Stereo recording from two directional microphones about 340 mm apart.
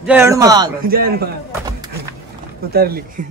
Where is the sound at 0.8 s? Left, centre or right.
Right.